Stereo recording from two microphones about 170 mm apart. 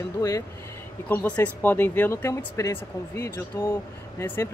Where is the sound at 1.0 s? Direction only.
10° left (ahead or behind).